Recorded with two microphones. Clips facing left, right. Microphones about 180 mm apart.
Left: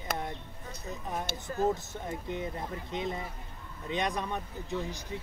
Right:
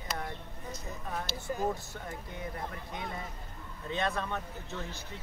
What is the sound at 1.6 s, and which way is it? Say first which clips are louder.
Speech: left 7 dB; 20° left (ahead or behind).